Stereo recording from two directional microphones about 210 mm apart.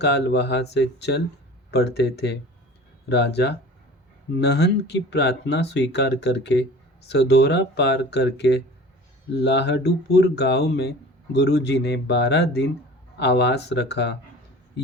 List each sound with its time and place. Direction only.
0.0 s speech: 55° left (ahead or behind)